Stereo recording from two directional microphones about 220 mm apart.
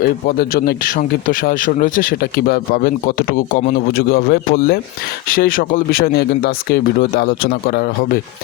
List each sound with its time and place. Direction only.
0.0 s speech: 45° left (ahead or behind)